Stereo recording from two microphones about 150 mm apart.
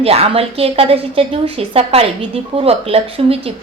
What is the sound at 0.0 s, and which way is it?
A woman's voice, 40° right (ahead or behind).